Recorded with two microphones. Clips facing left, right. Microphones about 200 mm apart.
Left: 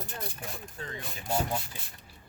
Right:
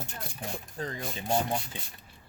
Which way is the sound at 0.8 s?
35° right (ahead or behind).